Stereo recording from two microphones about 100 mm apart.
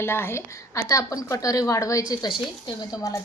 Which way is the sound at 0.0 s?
25° left (ahead or behind).